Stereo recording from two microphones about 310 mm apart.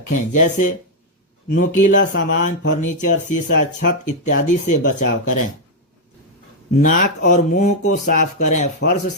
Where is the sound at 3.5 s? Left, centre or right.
Left.